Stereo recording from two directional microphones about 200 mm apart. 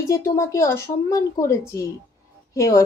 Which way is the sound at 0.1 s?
15° left (ahead or behind).